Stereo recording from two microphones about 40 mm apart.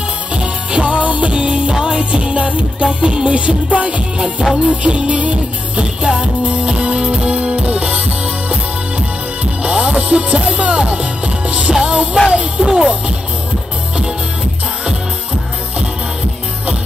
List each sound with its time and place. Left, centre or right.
0.4 s music: right
9.4 s music: right
12.6 s speech: centre